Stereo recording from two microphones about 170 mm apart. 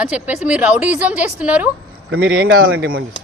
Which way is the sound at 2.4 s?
60° right (ahead or behind).